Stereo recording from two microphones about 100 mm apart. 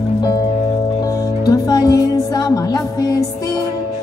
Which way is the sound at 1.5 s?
40° left (ahead or behind).